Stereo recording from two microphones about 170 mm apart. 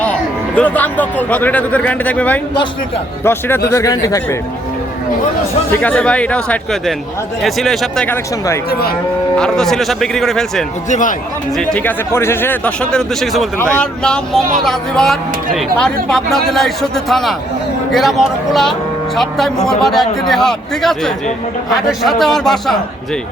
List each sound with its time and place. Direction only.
0.0 s a man's voice: 10° left (ahead or behind)
5.7 s a man's voice: 10° left (ahead or behind)
10.8 s a man's voice: 45° left (ahead or behind)
11.5 s a man's voice: 10° left (ahead or behind)